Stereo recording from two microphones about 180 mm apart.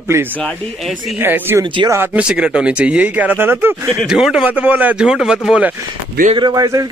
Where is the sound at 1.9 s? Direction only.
10° right (ahead or behind).